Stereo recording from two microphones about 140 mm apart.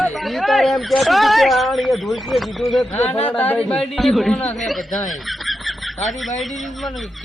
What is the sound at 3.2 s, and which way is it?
Speech, 15° left (ahead or behind).